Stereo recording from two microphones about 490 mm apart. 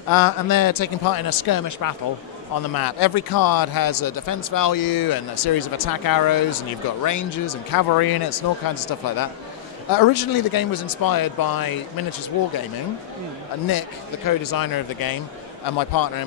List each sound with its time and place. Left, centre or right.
0.1 s speech: left
13.7 s speech: left